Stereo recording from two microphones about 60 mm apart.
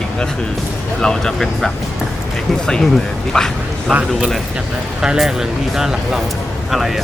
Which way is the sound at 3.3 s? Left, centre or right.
Centre.